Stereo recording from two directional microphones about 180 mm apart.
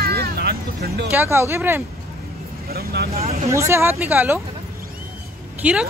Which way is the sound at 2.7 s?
60° right (ahead or behind).